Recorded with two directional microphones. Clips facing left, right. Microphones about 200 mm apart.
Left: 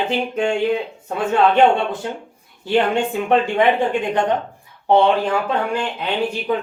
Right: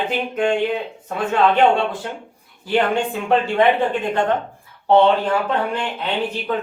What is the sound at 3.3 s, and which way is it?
Speech, 15° left (ahead or behind).